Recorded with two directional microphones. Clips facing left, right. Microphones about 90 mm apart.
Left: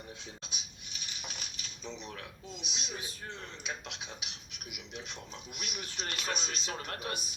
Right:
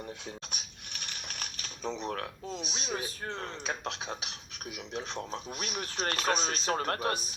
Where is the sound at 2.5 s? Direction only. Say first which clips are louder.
Right 6 dB; 40° right (ahead or behind).